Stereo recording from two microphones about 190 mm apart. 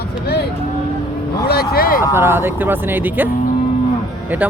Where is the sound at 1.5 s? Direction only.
55° left (ahead or behind).